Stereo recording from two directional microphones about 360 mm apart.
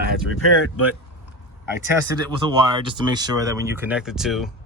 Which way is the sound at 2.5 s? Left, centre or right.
Centre.